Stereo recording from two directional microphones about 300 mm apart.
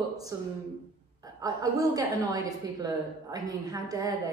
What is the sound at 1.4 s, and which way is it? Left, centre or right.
A woman's voice, centre.